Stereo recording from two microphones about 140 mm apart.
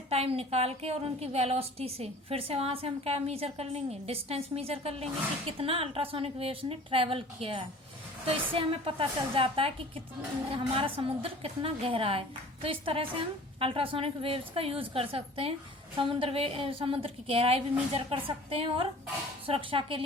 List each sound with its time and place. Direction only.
0.1 s a woman's voice: 45° right (ahead or behind)